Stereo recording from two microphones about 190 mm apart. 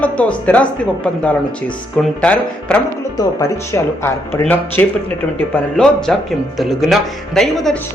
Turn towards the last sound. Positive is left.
turn(degrees=0)  # may be behind; listen again after turning